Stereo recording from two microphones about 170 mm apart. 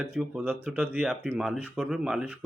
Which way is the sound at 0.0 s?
5° right (ahead or behind).